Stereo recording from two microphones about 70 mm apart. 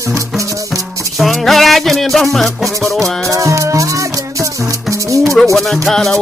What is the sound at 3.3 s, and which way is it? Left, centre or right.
Music, right.